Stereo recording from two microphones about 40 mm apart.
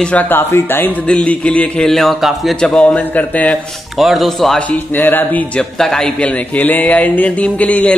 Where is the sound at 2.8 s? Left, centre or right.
Left.